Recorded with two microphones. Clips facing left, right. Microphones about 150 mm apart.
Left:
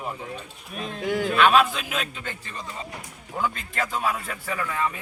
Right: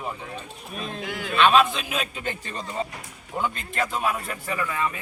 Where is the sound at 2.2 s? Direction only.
20° right (ahead or behind); by 5.0 s centre (ahead or behind).